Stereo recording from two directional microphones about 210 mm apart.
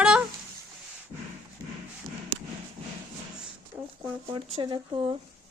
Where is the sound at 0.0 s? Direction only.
5° right (ahead or behind).